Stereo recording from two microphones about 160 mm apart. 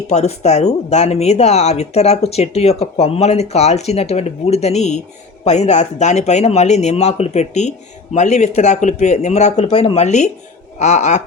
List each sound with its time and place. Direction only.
0.1 s speech: 45° left (ahead or behind)